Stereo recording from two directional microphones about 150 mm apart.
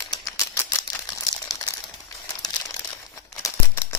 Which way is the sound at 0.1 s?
20° left (ahead or behind).